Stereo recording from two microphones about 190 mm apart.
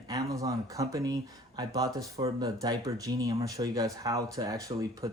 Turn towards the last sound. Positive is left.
turn(degrees=-20)  # may be behind; listen again after turning